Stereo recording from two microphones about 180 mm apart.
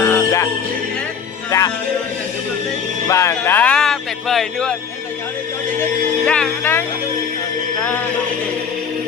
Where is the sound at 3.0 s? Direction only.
15° left (ahead or behind).